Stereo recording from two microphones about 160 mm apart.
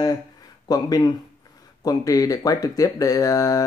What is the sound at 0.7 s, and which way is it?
Speech, 25° left (ahead or behind).